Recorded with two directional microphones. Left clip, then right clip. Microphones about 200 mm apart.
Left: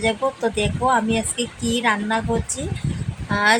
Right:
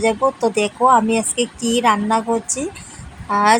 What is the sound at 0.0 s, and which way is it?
Speech, 15° right (ahead or behind).